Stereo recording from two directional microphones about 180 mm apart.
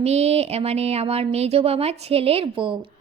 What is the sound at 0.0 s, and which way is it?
A woman's voice, 35° right (ahead or behind).